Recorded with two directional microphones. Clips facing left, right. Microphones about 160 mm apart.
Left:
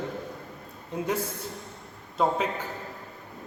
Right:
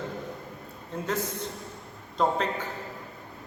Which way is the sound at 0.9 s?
15° left (ahead or behind).